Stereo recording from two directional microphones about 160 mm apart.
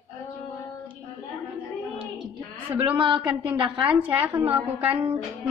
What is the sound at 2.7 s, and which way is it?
Speech, 30° right (ahead or behind).